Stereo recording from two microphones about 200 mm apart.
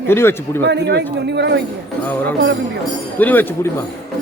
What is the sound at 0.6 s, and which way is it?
Speech, 60° right (ahead or behind).